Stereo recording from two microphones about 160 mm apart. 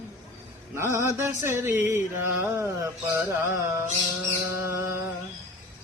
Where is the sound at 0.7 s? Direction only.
15° right (ahead or behind).